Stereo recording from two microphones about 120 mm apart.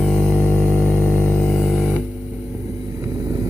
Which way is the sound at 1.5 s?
Centre (ahead or behind).